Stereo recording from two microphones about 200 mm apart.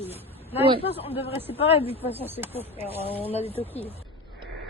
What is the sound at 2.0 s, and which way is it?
Speech, 10° left (ahead or behind).